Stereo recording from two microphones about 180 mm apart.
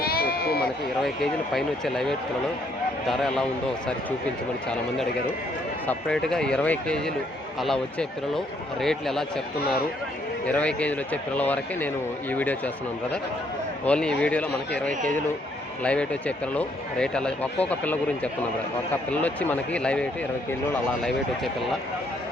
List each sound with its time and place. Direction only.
0.0 s bleat: 55° left (ahead or behind)
1.0 s speech: centre (ahead or behind)
5.9 s speech: 5° left (ahead or behind)
9.6 s speech: 60° left (ahead or behind)
10.4 s speech: 5° left (ahead or behind)
13.8 s speech: 5° left (ahead or behind)